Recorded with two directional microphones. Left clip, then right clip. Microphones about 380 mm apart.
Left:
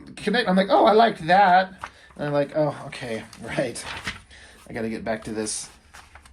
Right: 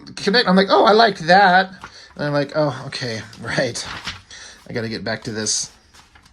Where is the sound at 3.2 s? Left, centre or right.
Right.